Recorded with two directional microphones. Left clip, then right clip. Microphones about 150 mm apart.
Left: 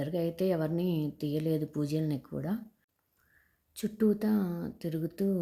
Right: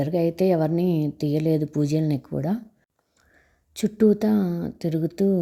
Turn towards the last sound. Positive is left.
turn(degrees=-30)  # may be behind; listen again after turning